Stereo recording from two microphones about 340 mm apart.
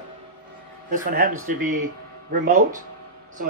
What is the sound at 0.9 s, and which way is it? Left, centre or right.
Speech, right.